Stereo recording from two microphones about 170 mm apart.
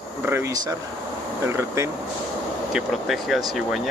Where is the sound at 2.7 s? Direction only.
Centre (ahead or behind).